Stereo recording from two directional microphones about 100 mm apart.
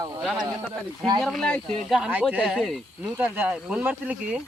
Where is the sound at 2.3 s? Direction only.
5° right (ahead or behind).